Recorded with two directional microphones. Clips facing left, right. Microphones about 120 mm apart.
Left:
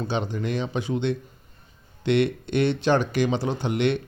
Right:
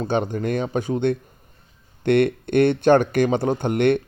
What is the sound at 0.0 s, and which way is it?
Speech, 50° right (ahead or behind).